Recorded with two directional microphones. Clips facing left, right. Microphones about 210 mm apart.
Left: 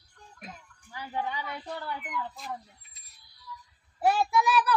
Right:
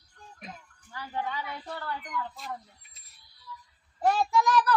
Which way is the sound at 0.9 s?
15° left (ahead or behind).